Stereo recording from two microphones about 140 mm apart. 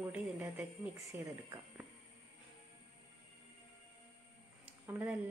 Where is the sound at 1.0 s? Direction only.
20° right (ahead or behind).